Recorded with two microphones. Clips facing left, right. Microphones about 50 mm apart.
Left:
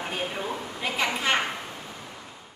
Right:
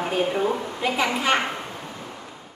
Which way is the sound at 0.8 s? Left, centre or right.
Centre.